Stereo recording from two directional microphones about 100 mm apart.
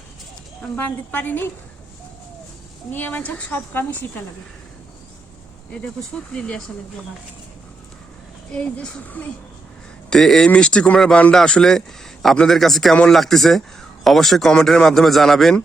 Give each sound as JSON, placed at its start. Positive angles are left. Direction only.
{"t": 0.8, "sound": "a woman's voice", "side_deg": 20}
{"t": 2.9, "sound": "speech", "side_deg": 15}
{"t": 5.8, "sound": "speech", "side_deg": 5}
{"t": 8.5, "sound": "speech", "side_deg": 15}
{"t": 10.1, "sound": "speech", "side_deg": 5}